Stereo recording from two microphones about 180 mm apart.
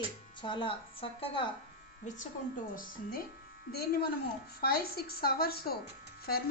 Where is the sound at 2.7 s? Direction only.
55° left (ahead or behind).